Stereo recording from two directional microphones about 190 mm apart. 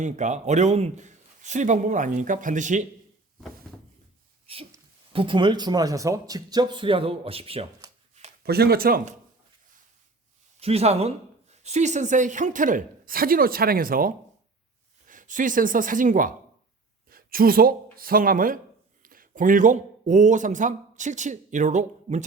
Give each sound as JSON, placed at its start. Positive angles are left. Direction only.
{"t": 0.0, "sound": "speech", "side_deg": -40}
{"t": 4.5, "sound": "a sound", "side_deg": -30}
{"t": 5.1, "sound": "speech", "side_deg": -25}
{"t": 8.4, "sound": "speech", "side_deg": -55}
{"t": 10.6, "sound": "speech", "side_deg": -35}
{"t": 17.1, "sound": "a sound", "side_deg": -50}
{"t": 17.9, "sound": "speech", "side_deg": -50}